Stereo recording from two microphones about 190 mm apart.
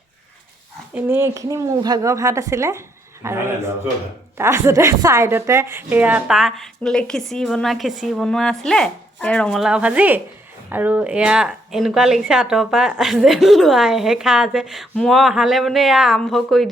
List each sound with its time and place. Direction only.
0.9 s a woman's voice: 10° right (ahead or behind)